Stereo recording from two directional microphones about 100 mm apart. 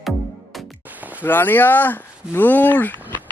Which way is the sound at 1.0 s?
15° right (ahead or behind).